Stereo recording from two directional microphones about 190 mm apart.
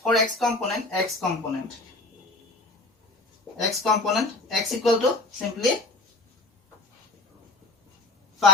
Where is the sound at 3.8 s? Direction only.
Centre (ahead or behind).